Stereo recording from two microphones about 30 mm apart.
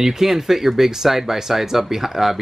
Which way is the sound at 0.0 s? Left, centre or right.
Centre.